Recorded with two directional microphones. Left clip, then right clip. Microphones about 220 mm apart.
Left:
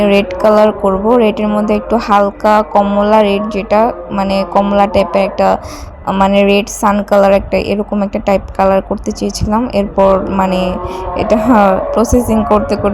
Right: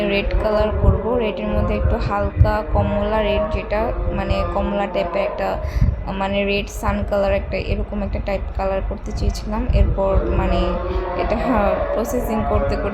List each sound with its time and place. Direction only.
0.0 s a woman's voice: 35° left (ahead or behind)